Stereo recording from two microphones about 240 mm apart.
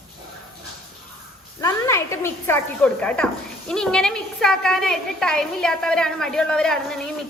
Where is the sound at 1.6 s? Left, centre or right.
Centre.